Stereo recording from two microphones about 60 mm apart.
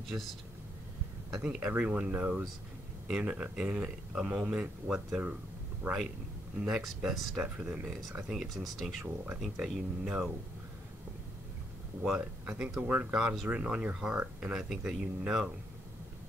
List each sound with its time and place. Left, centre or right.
1.4 s speech: centre
6.6 s speech: centre
7.4 s speech: right
8.3 s speech: centre
8.6 s speech: centre
9.0 s speech: right
12.0 s speech: centre
12.8 s speech: right
13.1 s speech: centre
13.5 s speech: right